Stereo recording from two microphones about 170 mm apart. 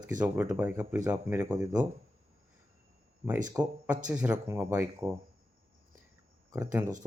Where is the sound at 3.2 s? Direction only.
10° right (ahead or behind).